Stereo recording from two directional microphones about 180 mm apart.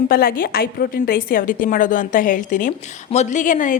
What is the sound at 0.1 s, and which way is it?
A woman's voice, 55° left (ahead or behind).